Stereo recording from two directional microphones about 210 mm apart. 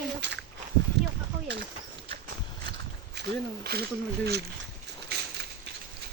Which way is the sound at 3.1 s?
50° right (ahead or behind).